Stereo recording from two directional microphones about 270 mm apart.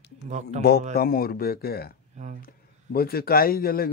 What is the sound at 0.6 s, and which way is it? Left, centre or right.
Speech, left.